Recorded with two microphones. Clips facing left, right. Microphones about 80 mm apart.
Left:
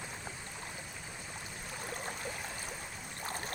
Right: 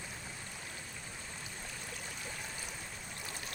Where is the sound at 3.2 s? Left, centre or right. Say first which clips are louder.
Left 8 dB; left.